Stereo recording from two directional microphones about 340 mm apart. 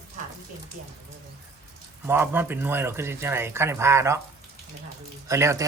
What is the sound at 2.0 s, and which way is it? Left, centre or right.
Speech, centre.